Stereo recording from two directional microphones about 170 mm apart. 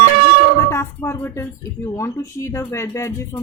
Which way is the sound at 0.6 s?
15° left (ahead or behind).